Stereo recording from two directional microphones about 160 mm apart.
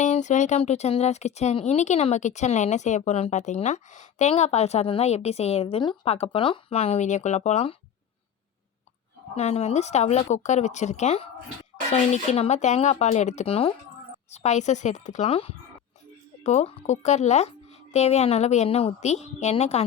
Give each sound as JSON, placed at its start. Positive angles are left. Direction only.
{"t": 0.0, "sound": "speech", "side_deg": 50}
{"t": 9.3, "sound": "speech", "side_deg": 40}